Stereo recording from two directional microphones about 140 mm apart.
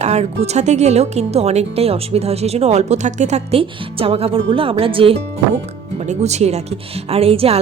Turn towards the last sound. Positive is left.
turn(degrees=-45)  # may be behind; listen again after turning